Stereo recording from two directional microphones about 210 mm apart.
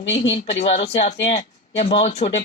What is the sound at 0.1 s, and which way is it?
Speech, 30° left (ahead or behind).